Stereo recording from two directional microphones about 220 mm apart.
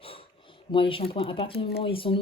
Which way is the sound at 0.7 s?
25° left (ahead or behind).